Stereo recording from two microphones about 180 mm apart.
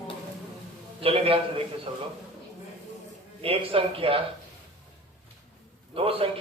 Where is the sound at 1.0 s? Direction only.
30° right (ahead or behind).